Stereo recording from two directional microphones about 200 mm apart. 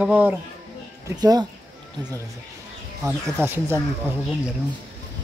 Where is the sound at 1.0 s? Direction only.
20° right (ahead or behind).